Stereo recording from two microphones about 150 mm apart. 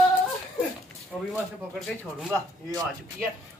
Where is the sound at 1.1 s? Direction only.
5° right (ahead or behind).